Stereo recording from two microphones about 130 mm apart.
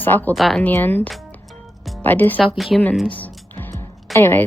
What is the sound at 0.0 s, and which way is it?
Speech, 15° left (ahead or behind).